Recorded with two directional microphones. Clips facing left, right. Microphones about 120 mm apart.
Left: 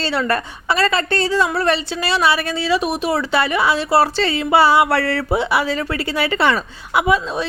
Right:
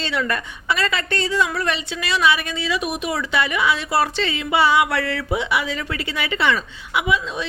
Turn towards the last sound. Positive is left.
turn(degrees=40)  # may be behind; listen again after turning